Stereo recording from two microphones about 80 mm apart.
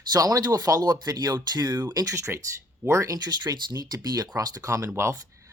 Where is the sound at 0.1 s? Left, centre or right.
Right.